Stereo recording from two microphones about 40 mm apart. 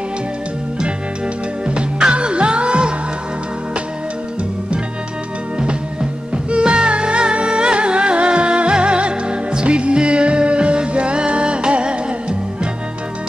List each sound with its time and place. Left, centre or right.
1.7 s music: right
5.6 s music: right